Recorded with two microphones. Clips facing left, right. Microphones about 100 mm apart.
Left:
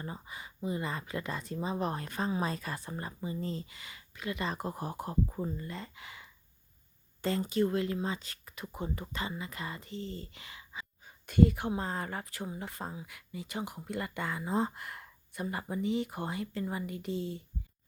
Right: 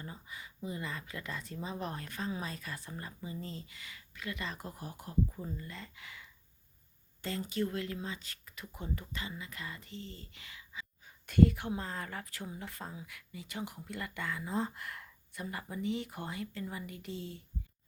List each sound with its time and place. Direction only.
0.0 s speech: 25° left (ahead or behind)
4.7 s speech: 40° left (ahead or behind)
11.3 s speech: 15° left (ahead or behind)